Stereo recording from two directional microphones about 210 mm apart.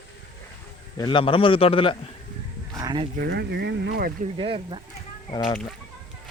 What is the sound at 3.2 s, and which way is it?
Speech, 50° right (ahead or behind).